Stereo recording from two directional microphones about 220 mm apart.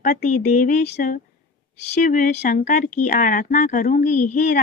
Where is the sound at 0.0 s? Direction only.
35° left (ahead or behind).